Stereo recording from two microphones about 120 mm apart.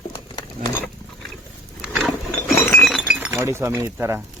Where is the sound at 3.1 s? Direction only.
10° right (ahead or behind).